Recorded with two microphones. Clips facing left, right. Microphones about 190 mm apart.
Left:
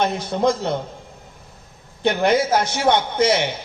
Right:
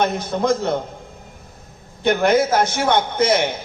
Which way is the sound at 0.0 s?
50° right (ahead or behind).